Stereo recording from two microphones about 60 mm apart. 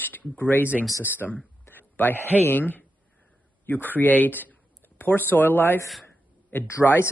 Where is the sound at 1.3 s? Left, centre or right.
Left.